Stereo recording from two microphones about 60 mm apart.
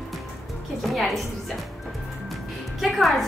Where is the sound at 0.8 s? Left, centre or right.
Centre.